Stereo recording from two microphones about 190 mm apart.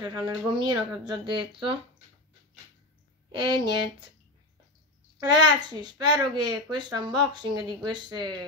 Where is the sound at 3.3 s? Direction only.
25° right (ahead or behind).